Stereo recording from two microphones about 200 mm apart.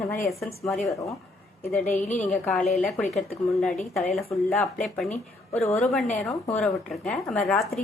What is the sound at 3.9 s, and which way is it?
A woman's voice, centre (ahead or behind).